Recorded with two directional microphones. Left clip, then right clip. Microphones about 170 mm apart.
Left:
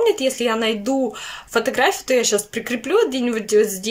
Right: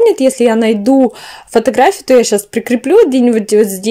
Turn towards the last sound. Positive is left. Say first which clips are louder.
# right 8 dB
turn(degrees=-35)  # may be behind; listen again after turning